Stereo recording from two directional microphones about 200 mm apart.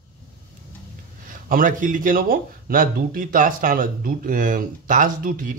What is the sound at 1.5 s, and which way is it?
A man's voice, 40° right (ahead or behind).